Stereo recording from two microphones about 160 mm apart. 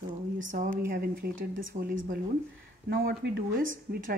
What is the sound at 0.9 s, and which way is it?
Speech, 70° right (ahead or behind).